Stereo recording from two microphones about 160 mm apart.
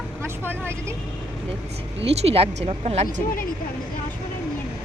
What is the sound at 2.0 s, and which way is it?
Speech, 40° right (ahead or behind).